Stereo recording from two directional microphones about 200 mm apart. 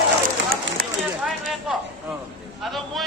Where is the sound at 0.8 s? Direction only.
50° right (ahead or behind).